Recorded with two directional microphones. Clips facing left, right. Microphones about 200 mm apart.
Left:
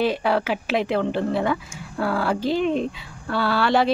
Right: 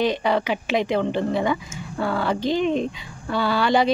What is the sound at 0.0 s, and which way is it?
Speech, 5° left (ahead or behind).